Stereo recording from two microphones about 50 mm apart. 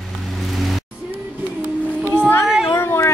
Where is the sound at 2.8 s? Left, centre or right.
Left.